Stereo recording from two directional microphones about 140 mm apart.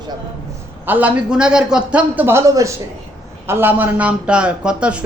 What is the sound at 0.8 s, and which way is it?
A man's voice, 10° right (ahead or behind).